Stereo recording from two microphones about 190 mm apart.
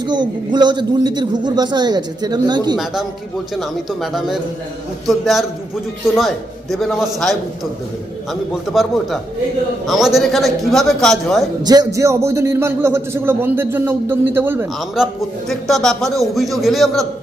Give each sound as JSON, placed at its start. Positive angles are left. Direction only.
{"t": 0.0, "sound": "a man's voice", "side_deg": -25}
{"t": 2.7, "sound": "a man's voice", "side_deg": 0}
{"t": 11.6, "sound": "a man's voice", "side_deg": -20}